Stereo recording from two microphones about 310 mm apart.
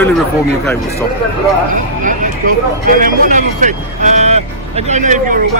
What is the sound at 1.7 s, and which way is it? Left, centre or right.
A man's voice, right.